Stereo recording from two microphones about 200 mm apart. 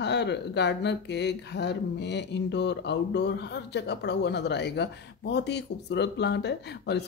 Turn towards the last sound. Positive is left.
turn(degrees=55)  # may be behind; listen again after turning